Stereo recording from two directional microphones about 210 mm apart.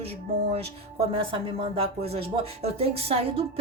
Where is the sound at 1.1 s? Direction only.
25° right (ahead or behind).